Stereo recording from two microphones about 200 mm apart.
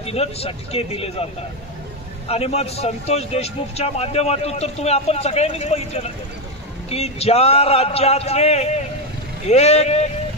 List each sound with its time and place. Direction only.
0.0 s speech: 30° left (ahead or behind)
2.2 s speech: 30° left (ahead or behind)